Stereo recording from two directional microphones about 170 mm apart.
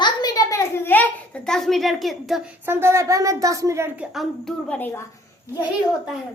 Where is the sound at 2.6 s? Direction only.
15° right (ahead or behind); by 5.0 s 10° left (ahead or behind).